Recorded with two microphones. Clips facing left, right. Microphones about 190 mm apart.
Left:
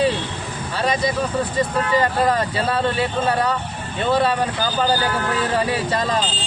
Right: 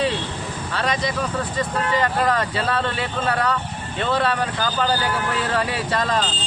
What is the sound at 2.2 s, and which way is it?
Speech, 25° left (ahead or behind).